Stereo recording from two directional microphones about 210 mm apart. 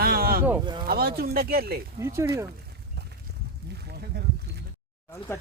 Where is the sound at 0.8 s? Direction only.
45° right (ahead or behind).